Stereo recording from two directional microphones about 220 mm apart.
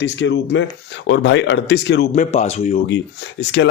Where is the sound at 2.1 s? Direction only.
30° left (ahead or behind).